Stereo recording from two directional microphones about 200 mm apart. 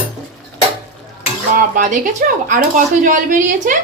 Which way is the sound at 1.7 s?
40° right (ahead or behind).